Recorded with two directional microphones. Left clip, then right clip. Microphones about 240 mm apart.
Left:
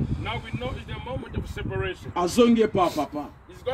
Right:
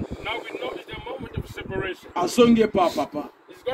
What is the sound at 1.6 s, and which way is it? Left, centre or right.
Speech, centre.